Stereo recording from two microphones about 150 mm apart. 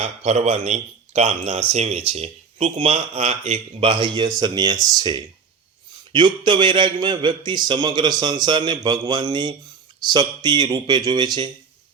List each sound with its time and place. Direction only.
0.0 s a man's voice: 45° right (ahead or behind); by 11.5 s 30° right (ahead or behind)